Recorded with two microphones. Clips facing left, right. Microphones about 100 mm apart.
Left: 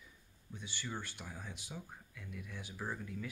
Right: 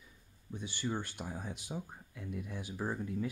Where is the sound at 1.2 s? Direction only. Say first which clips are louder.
Right 6 dB; 30° right (ahead or behind).